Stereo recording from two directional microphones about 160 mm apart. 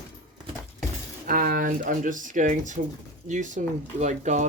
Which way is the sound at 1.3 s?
60° right (ahead or behind).